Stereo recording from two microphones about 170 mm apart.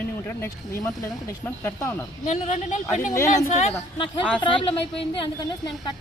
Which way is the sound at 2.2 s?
40° left (ahead or behind).